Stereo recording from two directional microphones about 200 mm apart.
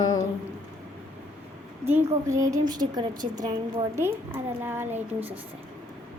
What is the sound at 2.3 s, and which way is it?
A woman's voice, 15° right (ahead or behind).